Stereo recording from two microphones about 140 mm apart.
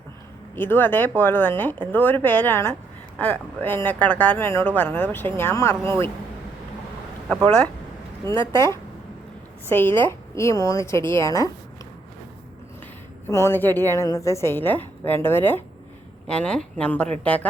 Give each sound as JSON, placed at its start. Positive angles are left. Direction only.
{"t": 0.5, "sound": "a woman's voice", "side_deg": 15}
{"t": 7.4, "sound": "a woman's voice", "side_deg": 15}
{"t": 13.2, "sound": "a woman's voice", "side_deg": 15}